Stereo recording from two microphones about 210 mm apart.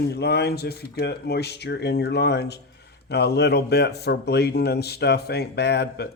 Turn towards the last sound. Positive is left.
turn(degrees=50)  # may be behind; listen again after turning